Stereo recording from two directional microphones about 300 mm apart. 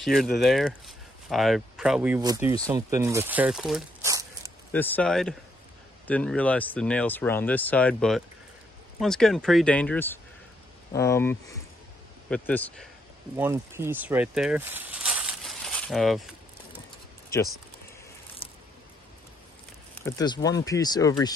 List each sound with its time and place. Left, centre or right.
0.0 s speech: centre
4.7 s speech: centre
13.4 s speech: centre
18.4 s a sound: centre
20.0 s speech: centre